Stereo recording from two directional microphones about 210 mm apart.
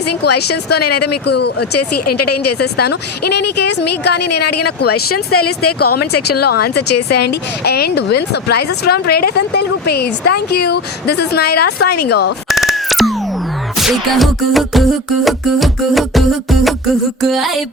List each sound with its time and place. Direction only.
0.4 s a woman's voice: 50° left (ahead or behind)
0.8 s speech: 90° left
1.3 s a woman's voice: 50° left (ahead or behind)
1.7 s speech: 90° left
2.6 s a woman's voice: 50° left (ahead or behind)
4.9 s speech: 90° left
6.2 s a woman's voice: 50° left (ahead or behind)
12.5 s camera: centre (ahead or behind)
13.7 s music: centre (ahead or behind)